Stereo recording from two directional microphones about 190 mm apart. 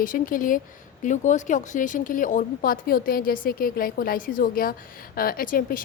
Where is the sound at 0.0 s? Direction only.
45° left (ahead or behind).